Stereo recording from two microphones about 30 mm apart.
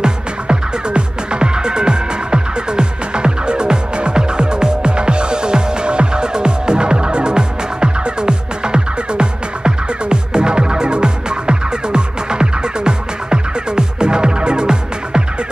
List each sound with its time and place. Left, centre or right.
0.0 s music: right